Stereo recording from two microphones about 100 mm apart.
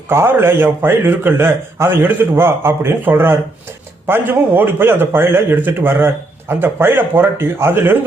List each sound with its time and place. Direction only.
0.1 s a man's voice: 25° right (ahead or behind)